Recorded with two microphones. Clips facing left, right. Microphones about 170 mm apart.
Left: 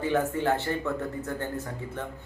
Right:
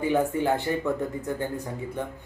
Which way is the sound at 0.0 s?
15° right (ahead or behind).